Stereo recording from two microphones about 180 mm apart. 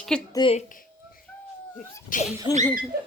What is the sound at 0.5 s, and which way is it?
Speech, 45° left (ahead or behind).